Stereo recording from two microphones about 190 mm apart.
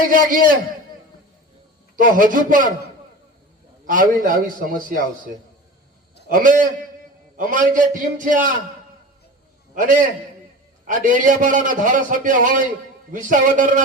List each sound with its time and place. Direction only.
0.1 s a man's voice: 45° right (ahead or behind)
2.0 s a man's voice: 45° right (ahead or behind)
3.8 s a man's voice: 45° right (ahead or behind)
6.2 s a man's voice: 45° right (ahead or behind)
9.7 s a man's voice: 45° right (ahead or behind)